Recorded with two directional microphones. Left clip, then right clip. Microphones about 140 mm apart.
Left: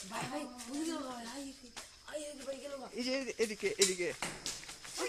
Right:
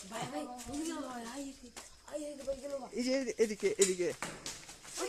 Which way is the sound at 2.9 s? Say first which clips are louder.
Right 3 dB; 60° right (ahead or behind).